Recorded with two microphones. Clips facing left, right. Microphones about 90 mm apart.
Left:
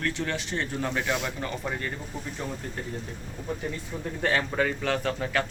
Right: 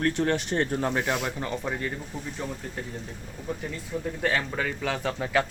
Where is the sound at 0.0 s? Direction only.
45° right (ahead or behind).